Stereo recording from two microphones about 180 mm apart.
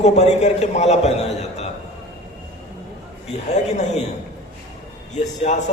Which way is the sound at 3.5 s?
40° left (ahead or behind).